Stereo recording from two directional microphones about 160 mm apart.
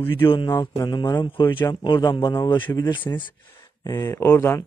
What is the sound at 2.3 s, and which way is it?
Speech, 15° left (ahead or behind).